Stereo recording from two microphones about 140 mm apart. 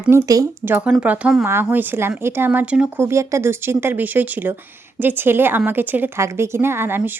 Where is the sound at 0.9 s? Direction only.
10° right (ahead or behind).